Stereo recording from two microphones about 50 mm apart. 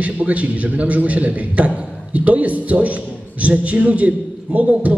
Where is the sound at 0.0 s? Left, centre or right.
Right.